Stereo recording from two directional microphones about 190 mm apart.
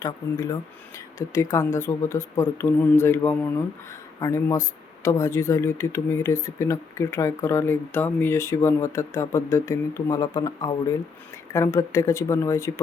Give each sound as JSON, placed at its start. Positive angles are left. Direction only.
{"t": 0.9, "sound": "speech", "side_deg": 15}